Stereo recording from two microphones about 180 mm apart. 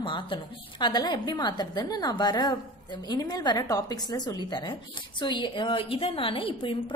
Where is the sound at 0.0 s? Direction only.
25° left (ahead or behind).